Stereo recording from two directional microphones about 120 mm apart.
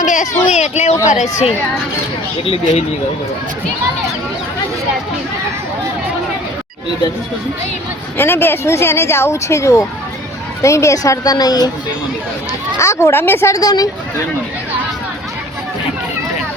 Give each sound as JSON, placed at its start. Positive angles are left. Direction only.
{"t": 0.0, "sound": "speech", "side_deg": 90}
{"t": 2.4, "sound": "speech", "side_deg": 55}
{"t": 8.2, "sound": "speech", "side_deg": 20}
{"t": 12.8, "sound": "speech", "side_deg": 25}